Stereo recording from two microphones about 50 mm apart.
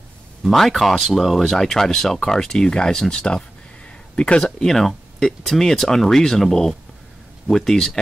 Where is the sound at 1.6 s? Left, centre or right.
Centre.